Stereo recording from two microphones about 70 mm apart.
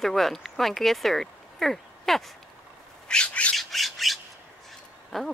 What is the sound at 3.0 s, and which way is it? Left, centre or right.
Bird, centre.